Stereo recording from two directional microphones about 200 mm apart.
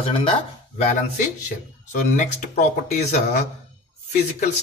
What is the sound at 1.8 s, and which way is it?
Speech, 35° left (ahead or behind).